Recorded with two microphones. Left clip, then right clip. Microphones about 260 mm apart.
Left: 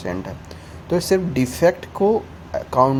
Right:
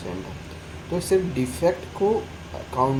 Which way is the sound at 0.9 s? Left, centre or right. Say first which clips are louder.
Left 3 dB; left.